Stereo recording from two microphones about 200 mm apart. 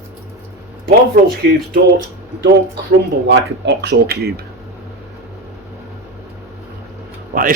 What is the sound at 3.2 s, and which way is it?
Speech, 60° right (ahead or behind).